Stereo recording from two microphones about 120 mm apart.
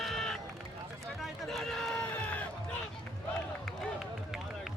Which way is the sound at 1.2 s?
Centre (ahead or behind).